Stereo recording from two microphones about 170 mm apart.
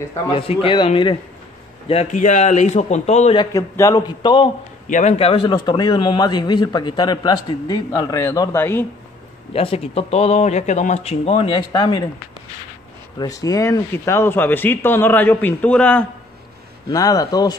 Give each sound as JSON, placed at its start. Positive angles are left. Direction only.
{"t": 0.3, "sound": "a man's voice", "side_deg": 35}
{"t": 1.9, "sound": "speech", "side_deg": 40}
{"t": 3.3, "sound": "a man's voice", "side_deg": 20}
{"t": 4.8, "sound": "a man's voice", "side_deg": 45}
{"t": 9.5, "sound": "speech", "side_deg": 35}
{"t": 13.2, "sound": "a man's voice", "side_deg": 20}
{"t": 16.9, "sound": "a man's voice", "side_deg": 20}